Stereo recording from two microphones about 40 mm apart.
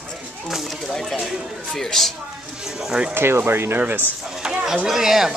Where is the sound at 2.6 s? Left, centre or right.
Centre.